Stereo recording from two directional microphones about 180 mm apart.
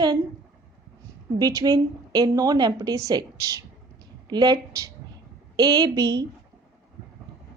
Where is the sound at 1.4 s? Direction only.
20° right (ahead or behind).